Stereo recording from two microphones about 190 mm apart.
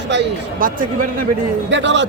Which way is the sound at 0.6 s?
45° right (ahead or behind).